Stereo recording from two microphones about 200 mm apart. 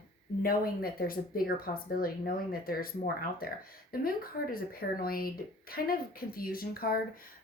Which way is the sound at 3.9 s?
45° left (ahead or behind).